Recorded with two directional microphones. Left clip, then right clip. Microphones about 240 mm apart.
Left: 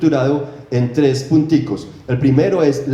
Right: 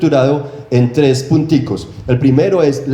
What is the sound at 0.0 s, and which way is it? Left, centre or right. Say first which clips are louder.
A man's voice: right 4 dB; right.